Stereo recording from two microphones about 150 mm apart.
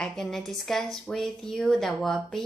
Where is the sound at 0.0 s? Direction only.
5° left (ahead or behind).